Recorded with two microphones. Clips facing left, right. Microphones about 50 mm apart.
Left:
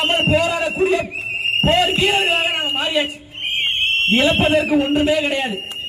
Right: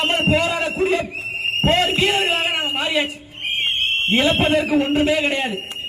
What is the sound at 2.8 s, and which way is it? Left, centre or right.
Speech, centre.